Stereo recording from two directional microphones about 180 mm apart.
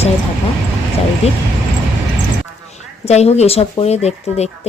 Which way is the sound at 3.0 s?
35° left (ahead or behind).